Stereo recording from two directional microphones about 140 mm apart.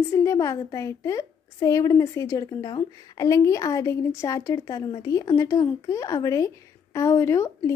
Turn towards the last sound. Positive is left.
turn(degrees=20)  # may be behind; listen again after turning